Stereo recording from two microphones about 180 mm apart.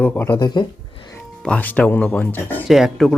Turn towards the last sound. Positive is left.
turn(degrees=0)  # may be behind; listen again after turning